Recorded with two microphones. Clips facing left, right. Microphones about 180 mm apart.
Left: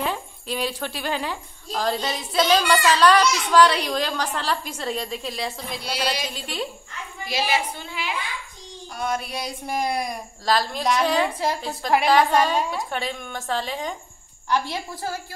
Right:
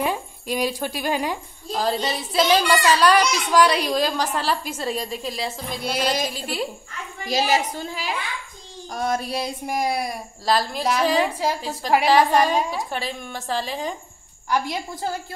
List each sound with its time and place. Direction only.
0.0 s a child's voice: 10° right (ahead or behind)
5.9 s speech: 50° right (ahead or behind)
6.3 s a child's voice: 5° right (ahead or behind)
7.2 s a woman's voice: 40° right (ahead or behind)
9.7 s a woman's voice: 10° right (ahead or behind)
14.5 s a woman's voice: 20° right (ahead or behind)